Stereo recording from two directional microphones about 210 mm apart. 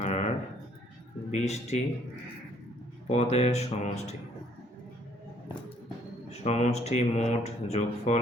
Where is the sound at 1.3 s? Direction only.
30° left (ahead or behind).